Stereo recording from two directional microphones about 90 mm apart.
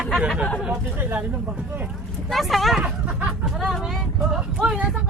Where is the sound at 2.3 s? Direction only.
Centre (ahead or behind).